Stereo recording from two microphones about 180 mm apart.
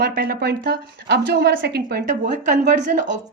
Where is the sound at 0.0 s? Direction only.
55° right (ahead or behind).